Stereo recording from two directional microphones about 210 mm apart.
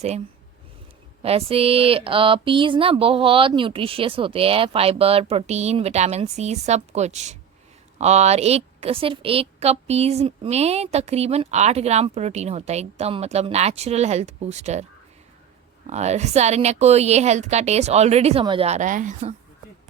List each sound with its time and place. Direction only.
1.2 s a sound: 30° right (ahead or behind)
7.9 s a woman's voice: 30° right (ahead or behind)
15.9 s a woman's voice: 30° right (ahead or behind)